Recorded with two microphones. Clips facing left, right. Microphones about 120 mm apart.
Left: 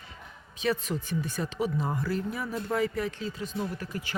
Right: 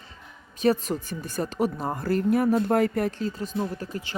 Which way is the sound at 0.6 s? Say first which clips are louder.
Right 6 dB; 40° right (ahead or behind).